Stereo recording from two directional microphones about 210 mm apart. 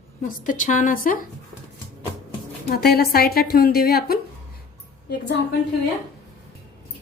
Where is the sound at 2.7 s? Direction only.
50° left (ahead or behind).